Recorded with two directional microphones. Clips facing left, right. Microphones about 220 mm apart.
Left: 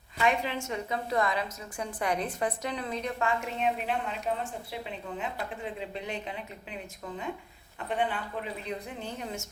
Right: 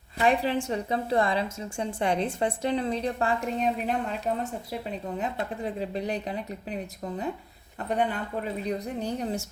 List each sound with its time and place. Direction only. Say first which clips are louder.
0.2 s a woman's voice: right 4 dB; 35° right (ahead or behind)
7.9 s a woman's voice: right 3 dB; 40° right (ahead or behind)